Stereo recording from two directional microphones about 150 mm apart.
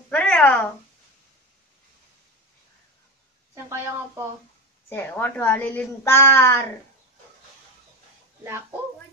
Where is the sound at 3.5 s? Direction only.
20° right (ahead or behind).